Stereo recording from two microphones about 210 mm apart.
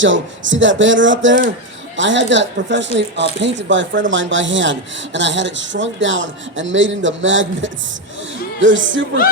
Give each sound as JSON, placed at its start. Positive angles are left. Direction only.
{"t": 0.0, "sound": "speech", "side_deg": -65}